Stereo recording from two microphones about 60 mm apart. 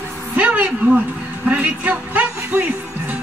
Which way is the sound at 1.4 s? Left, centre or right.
Right.